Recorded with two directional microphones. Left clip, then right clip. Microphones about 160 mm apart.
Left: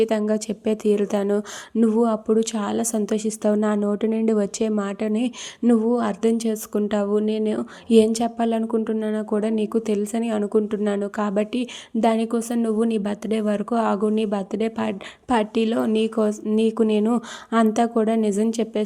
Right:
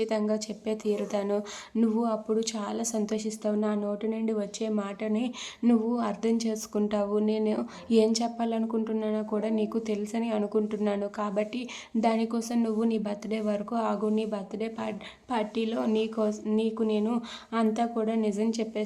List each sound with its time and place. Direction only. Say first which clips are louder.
0.0 s speech: left 7 dB; 30° left (ahead or behind)